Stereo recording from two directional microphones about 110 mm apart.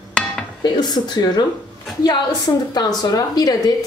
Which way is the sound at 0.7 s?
40° left (ahead or behind).